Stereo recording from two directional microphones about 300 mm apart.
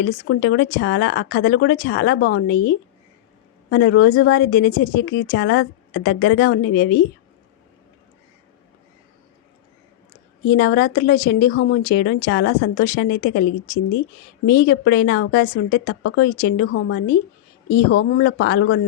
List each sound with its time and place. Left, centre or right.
0.0 s speech: left
10.5 s speech: left
14.4 s speech: left